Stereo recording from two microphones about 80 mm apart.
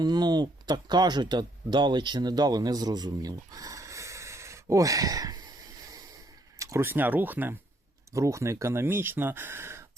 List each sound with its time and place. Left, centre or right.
0.0 s speech: right
6.6 s a sound: right
6.8 s speech: right
8.1 s speech: right